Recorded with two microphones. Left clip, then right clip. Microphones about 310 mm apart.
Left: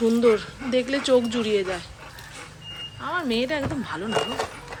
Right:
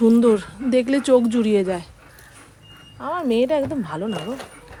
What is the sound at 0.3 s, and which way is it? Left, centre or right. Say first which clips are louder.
Speech: right 4 dB; centre.